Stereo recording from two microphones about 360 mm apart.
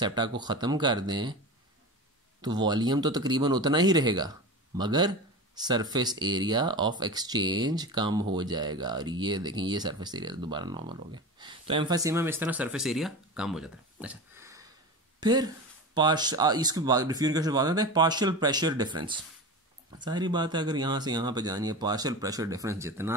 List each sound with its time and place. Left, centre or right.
0.0 s speech: centre
2.4 s speech: centre